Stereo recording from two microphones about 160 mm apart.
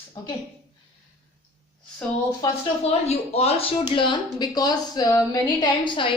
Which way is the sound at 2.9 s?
40° left (ahead or behind).